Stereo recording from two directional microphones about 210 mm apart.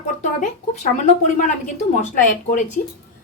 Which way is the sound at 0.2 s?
35° left (ahead or behind).